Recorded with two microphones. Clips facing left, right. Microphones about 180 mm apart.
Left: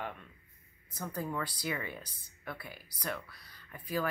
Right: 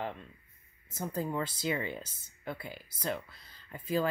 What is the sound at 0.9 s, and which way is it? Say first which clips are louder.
Speech: right 3 dB; 20° right (ahead or behind).